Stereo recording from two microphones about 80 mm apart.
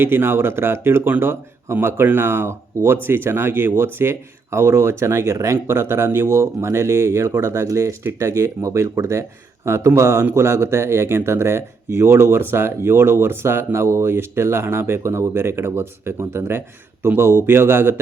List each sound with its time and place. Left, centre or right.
0.0 s speech: right